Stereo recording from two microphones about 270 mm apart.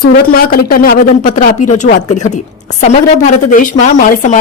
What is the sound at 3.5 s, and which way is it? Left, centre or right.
Speech, left.